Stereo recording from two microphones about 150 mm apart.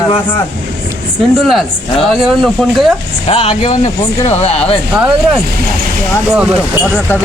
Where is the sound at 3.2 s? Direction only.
45° left (ahead or behind).